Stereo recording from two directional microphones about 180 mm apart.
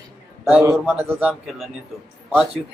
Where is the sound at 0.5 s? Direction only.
10° right (ahead or behind).